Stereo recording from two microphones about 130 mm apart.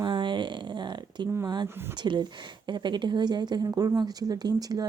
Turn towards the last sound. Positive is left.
turn(degrees=-30)  # may be behind; listen again after turning